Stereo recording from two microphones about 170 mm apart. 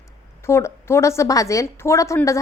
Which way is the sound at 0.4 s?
15° left (ahead or behind).